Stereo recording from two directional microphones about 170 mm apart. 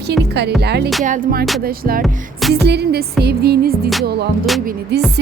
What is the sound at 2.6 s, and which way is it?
Speech, 75° right (ahead or behind).